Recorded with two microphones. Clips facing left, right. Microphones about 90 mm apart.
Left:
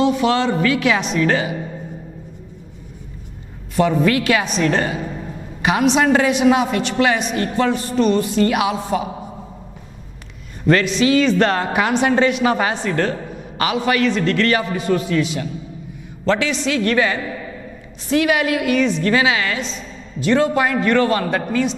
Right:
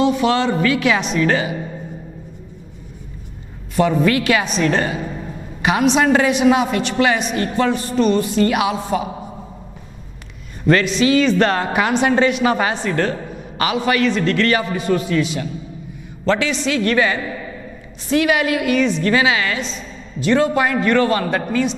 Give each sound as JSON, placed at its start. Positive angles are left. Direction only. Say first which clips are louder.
{"t": 0.0, "sound": "a man's voice", "louder": "even", "side_deg": -10}
{"t": 3.8, "sound": "a man's voice", "louder": "even", "side_deg": -10}
{"t": 10.7, "sound": "a man's voice", "louder": "even", "side_deg": -10}